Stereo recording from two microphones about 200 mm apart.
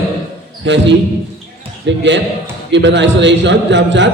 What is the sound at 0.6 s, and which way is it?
A man's voice, 60° right (ahead or behind).